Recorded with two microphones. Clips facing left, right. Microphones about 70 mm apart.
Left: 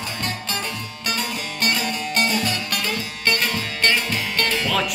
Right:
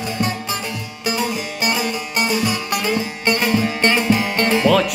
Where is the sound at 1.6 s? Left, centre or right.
Centre.